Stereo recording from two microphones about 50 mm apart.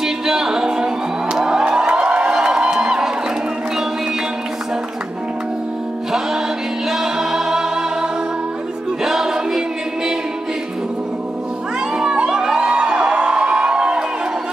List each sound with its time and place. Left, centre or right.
0.0 s music: centre
6.9 s music: centre
9.0 s music: centre
12.3 s music: centre